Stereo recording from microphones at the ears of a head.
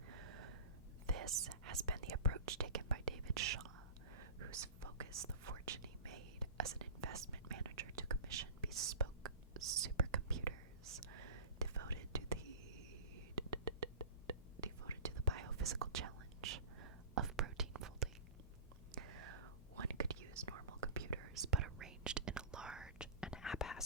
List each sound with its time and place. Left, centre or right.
0.1 s gasp: right
1.0 s whispering: right